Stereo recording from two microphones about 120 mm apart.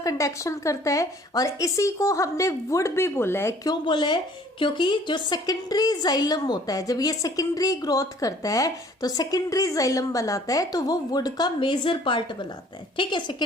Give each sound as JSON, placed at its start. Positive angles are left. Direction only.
{"t": 0.0, "sound": "speech", "side_deg": 30}
{"t": 3.7, "sound": "a woman's voice", "side_deg": 40}